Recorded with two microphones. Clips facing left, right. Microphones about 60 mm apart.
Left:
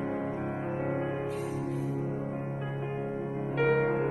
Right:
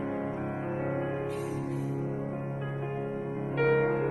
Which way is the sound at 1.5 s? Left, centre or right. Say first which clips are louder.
Even; right.